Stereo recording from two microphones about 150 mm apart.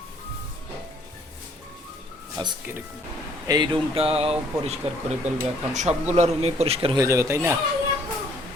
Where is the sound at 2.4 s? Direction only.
25° right (ahead or behind); by 6.9 s 45° right (ahead or behind).